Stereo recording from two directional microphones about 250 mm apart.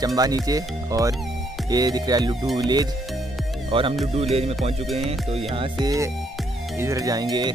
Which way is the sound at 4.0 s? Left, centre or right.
Right.